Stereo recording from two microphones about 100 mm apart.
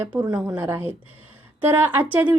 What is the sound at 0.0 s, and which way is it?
A woman's voice, 20° right (ahead or behind).